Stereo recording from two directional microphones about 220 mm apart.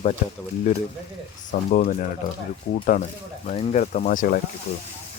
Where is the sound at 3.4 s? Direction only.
30° left (ahead or behind).